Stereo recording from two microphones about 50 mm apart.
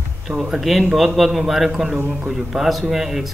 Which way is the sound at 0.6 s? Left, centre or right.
Centre.